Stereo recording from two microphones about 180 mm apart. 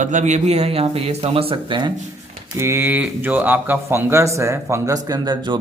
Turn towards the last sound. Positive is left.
turn(degrees=-20)  # may be behind; listen again after turning